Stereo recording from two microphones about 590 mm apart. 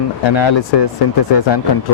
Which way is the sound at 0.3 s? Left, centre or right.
Left.